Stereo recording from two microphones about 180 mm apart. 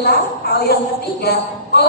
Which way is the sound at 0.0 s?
65° left (ahead or behind).